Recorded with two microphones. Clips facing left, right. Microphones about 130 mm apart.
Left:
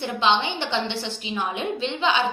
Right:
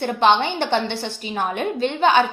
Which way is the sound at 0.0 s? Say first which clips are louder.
Right 5 dB; 55° right (ahead or behind).